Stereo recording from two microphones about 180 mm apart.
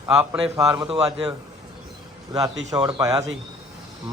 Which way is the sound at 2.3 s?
20° right (ahead or behind).